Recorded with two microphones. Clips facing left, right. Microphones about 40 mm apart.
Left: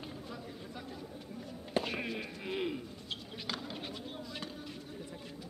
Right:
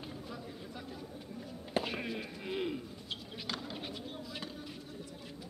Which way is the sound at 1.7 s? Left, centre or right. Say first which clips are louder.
Left 1 dB; centre.